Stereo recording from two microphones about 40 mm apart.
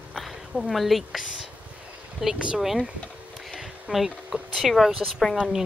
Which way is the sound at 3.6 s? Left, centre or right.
Centre.